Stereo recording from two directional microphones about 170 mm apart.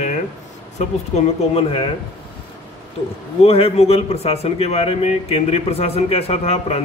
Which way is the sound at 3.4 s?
35° left (ahead or behind).